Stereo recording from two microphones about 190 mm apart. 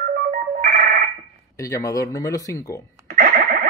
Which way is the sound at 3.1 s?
50° right (ahead or behind).